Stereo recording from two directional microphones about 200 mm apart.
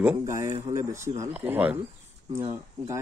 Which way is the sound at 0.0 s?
15° right (ahead or behind).